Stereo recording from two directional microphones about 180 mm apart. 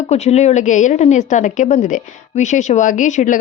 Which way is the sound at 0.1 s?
35° left (ahead or behind).